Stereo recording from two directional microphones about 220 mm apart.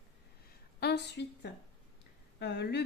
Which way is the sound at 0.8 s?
50° left (ahead or behind).